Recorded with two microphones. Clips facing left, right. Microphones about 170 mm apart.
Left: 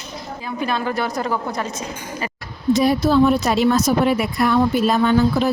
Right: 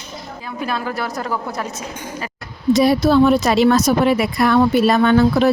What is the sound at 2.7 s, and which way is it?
Speech, 80° right.